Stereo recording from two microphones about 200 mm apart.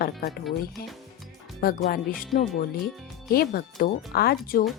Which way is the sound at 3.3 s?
50° left (ahead or behind).